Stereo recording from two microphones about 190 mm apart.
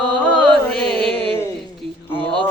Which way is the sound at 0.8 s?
25° right (ahead or behind).